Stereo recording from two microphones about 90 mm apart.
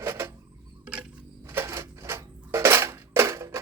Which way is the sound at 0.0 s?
30° right (ahead or behind).